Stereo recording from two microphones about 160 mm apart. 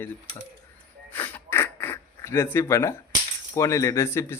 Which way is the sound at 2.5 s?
15° left (ahead or behind).